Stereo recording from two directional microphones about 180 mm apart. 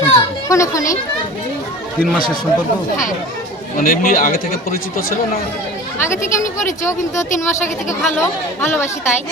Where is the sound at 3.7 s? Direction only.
50° left (ahead or behind).